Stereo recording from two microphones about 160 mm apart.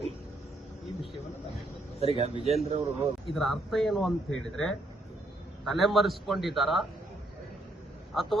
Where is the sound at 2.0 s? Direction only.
40° right (ahead or behind).